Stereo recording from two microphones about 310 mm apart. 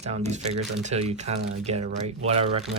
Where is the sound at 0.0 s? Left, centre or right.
Right.